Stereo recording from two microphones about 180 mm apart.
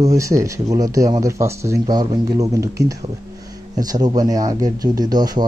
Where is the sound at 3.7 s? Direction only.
20° right (ahead or behind).